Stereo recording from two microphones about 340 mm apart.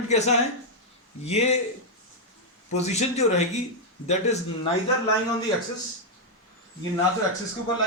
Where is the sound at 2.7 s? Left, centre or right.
Centre.